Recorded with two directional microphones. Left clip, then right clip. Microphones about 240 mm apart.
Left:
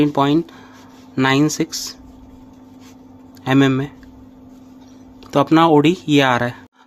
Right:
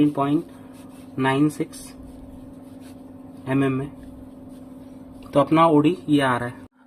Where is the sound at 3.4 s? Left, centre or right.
Left.